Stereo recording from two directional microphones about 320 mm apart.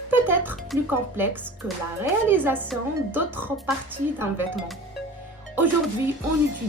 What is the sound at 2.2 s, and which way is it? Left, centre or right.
A woman's voice, centre.